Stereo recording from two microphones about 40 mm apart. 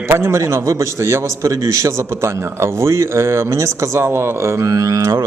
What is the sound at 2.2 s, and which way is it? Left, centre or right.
Speech, right.